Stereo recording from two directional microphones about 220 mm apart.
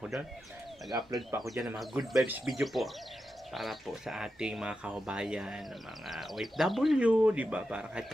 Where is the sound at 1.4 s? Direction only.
Centre (ahead or behind).